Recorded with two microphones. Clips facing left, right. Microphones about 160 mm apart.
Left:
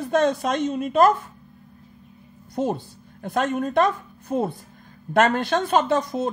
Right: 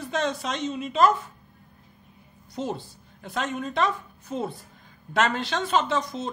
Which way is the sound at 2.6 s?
50° left (ahead or behind).